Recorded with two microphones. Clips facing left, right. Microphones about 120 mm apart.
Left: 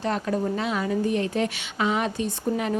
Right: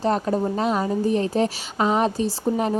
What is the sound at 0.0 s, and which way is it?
A woman's voice, 35° right (ahead or behind).